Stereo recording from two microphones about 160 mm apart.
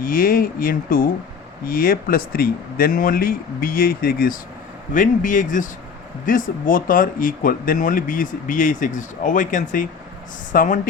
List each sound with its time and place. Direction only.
0.0 s speech: 60° left (ahead or behind)
4.9 s speech: 55° left (ahead or behind)